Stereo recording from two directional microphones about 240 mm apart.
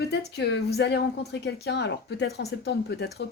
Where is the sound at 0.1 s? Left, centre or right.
Left.